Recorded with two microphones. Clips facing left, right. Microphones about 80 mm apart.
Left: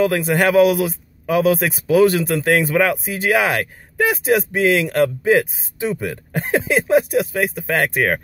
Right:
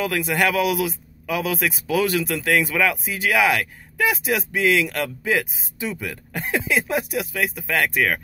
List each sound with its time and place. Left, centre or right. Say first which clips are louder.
0.0 s a man's voice: left 5 dB; left